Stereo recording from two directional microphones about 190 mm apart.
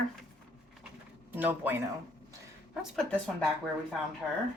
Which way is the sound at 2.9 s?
5° left (ahead or behind).